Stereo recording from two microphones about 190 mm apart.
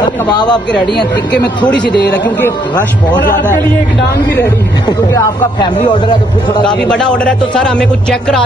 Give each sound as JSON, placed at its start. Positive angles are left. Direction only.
{"t": 0.3, "sound": "a man's voice", "side_deg": 20}
{"t": 1.9, "sound": "speech", "side_deg": 60}
{"t": 4.8, "sound": "a man's voice", "side_deg": 20}
{"t": 6.8, "sound": "speech", "side_deg": 5}